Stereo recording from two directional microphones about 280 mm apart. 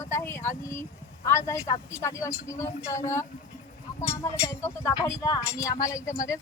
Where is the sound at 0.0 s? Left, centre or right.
Centre.